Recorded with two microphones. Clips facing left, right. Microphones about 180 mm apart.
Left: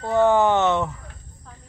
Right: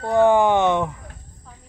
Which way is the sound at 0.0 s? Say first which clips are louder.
Right 2 dB; 15° right (ahead or behind).